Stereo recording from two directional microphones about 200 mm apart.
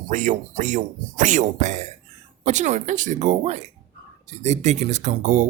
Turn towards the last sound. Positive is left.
turn(degrees=-40)  # may be behind; listen again after turning